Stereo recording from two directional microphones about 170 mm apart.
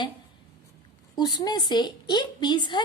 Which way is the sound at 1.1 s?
25° left (ahead or behind).